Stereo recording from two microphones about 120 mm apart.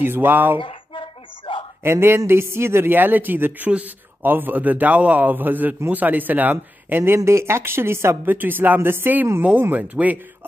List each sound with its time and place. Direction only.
0.0 s a man's voice: 15° right (ahead or behind)
0.6 s a sound: 45° left (ahead or behind)
1.8 s a man's voice: 20° right (ahead or behind)